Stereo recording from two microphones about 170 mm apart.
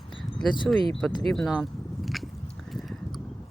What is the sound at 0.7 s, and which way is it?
Speech, 5° left (ahead or behind).